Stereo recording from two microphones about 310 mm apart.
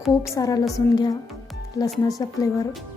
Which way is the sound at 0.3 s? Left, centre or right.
Centre.